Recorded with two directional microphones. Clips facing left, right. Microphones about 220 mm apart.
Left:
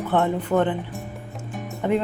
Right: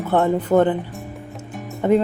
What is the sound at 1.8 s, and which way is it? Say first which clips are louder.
Speech: right 5 dB; 40° right (ahead or behind).